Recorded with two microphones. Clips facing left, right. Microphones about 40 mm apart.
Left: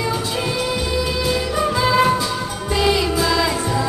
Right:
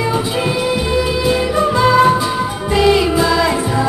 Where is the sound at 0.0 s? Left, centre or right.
Centre.